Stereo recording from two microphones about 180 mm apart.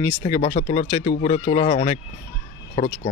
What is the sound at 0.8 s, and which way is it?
Speech, 25° left (ahead or behind).